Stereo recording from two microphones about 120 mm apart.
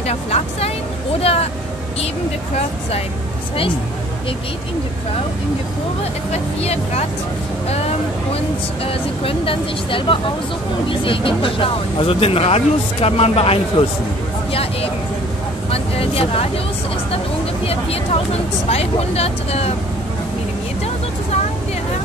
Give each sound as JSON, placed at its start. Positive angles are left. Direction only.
{"t": 0.0, "sound": "speech", "side_deg": 60}
{"t": 6.6, "sound": "speech", "side_deg": 60}
{"t": 8.8, "sound": "speech", "side_deg": 50}
{"t": 17.6, "sound": "speech", "side_deg": 55}